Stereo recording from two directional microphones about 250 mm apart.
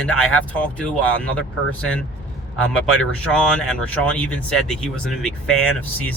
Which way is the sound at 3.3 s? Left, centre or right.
Centre.